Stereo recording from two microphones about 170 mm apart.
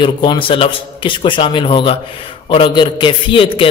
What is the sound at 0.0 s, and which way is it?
A man's voice, 30° left (ahead or behind).